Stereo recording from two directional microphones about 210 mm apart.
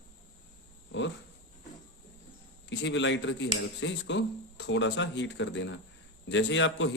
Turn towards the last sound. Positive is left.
turn(degrees=60)  # may be behind; listen again after turning